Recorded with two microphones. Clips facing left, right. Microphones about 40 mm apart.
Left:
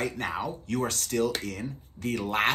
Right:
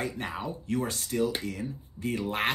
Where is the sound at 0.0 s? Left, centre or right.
Left.